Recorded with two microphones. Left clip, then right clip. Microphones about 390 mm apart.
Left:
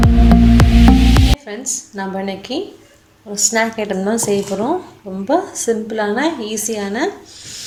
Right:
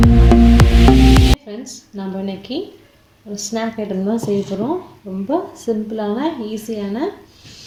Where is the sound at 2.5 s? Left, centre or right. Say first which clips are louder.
Left 2 dB; left.